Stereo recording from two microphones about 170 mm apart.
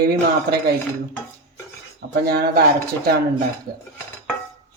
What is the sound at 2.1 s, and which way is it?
Speech, 65° right (ahead or behind).